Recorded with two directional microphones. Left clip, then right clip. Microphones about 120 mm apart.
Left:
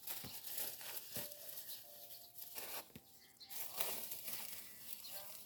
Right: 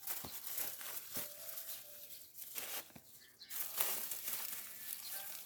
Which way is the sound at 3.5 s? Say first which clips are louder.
Right 3 dB; 20° right (ahead or behind).